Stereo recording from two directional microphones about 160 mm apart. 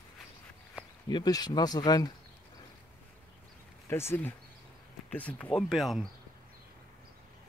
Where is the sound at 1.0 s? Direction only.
25° left (ahead or behind).